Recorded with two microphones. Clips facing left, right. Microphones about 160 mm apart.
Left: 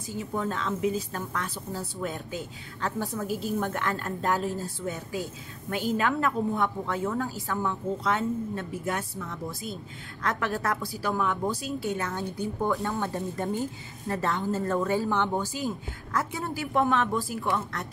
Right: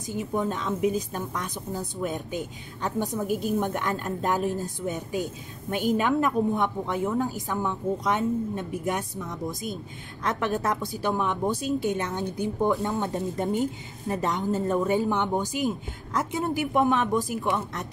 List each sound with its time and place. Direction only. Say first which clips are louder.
0.0 s a woman's voice: right 3 dB; 15° right (ahead or behind)